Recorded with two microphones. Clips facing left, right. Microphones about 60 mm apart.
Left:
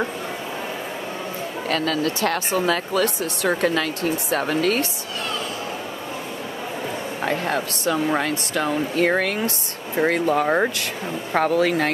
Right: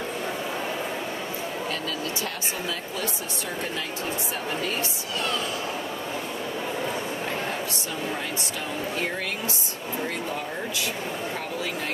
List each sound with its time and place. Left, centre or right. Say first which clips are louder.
1.7 s speech: left 8 dB; left
7.2 s speech: left 6 dB; left
11.3 s speech: left 12 dB; left